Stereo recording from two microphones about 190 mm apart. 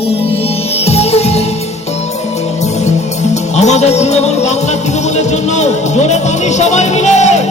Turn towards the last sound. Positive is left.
turn(degrees=35)  # may be behind; listen again after turning